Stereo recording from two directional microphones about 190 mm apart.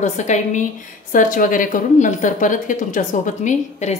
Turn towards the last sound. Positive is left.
turn(degrees=40)  # may be behind; listen again after turning